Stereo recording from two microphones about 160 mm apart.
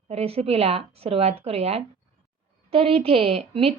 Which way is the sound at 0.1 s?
40° right (ahead or behind).